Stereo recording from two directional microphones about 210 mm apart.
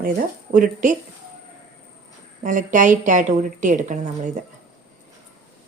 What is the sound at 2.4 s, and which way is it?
A woman's voice, 40° right (ahead or behind).